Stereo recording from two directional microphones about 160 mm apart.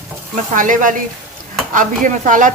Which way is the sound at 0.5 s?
55° right (ahead or behind).